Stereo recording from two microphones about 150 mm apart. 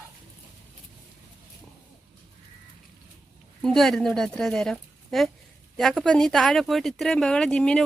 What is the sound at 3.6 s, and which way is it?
Speech, centre (ahead or behind).